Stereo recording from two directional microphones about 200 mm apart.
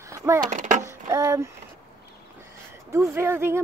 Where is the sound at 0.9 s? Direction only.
15° right (ahead or behind).